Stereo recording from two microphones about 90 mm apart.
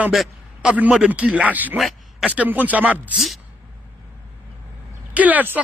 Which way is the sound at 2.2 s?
15° right (ahead or behind).